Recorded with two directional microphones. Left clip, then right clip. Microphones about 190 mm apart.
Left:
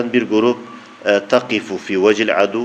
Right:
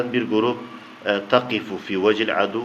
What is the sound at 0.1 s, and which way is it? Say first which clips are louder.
A man's voice: left 6 dB; 35° left (ahead or behind).